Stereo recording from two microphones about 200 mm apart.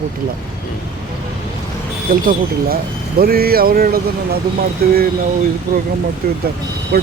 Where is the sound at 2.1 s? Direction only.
45° right (ahead or behind).